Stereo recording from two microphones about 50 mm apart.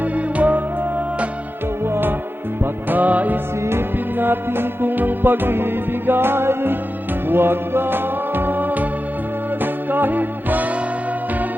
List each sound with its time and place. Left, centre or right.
0.0 s music: right
1.8 s music: right
2.6 s music: right
3.6 s music: right
4.2 s music: right